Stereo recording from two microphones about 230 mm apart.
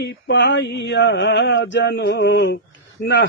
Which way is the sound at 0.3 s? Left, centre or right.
Left.